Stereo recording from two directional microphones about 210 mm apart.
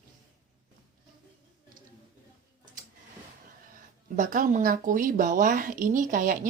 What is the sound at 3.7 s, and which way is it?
Speech, 40° right (ahead or behind).